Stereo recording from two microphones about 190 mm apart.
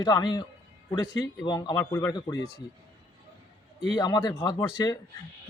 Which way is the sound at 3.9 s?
20° left (ahead or behind).